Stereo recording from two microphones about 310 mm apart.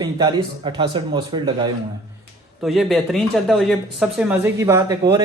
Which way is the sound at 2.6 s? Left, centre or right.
Centre.